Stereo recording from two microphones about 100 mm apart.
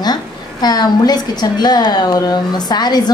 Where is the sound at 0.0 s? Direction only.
45° left (ahead or behind).